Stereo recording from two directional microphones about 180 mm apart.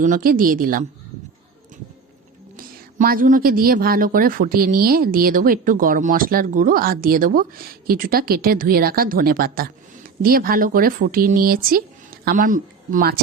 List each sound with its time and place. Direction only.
0.0 s a woman's voice: 50° right (ahead or behind)
2.6 s a woman's voice: 50° right (ahead or behind)